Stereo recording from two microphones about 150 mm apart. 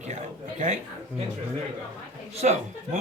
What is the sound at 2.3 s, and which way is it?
Speech, 50° right (ahead or behind).